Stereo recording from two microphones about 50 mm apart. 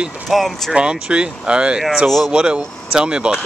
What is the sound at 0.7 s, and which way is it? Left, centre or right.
Speech, centre.